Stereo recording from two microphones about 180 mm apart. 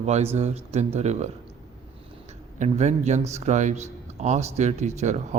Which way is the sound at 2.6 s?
40° right (ahead or behind).